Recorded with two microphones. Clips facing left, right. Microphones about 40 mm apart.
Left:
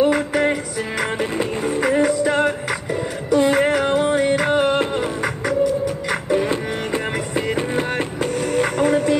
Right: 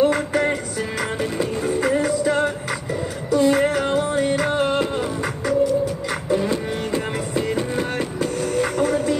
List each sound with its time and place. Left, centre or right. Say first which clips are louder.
0.0 s music: left 1 dB; centre; by 3.7 s left
3.7 s music: left 3 dB; centre
8.5 s music: left 3 dB; centre